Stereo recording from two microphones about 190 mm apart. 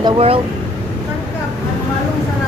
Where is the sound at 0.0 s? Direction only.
30° right (ahead or behind).